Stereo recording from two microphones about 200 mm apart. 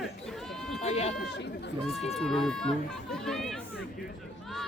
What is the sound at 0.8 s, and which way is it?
Speech, 30° left (ahead or behind).